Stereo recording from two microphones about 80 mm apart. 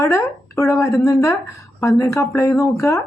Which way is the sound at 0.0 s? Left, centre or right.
Left.